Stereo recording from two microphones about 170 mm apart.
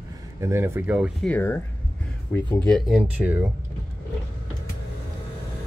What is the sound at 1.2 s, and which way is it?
Speech, 10° left (ahead or behind).